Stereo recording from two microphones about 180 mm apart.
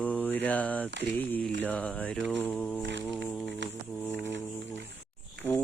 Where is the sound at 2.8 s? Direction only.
90° right.